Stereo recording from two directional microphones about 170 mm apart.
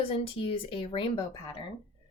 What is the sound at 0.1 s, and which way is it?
Speech, 30° left (ahead or behind).